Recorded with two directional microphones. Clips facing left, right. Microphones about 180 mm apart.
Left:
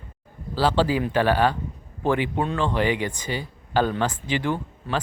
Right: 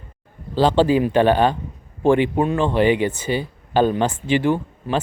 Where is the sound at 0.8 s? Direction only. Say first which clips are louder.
Right 6 dB; 20° right (ahead or behind).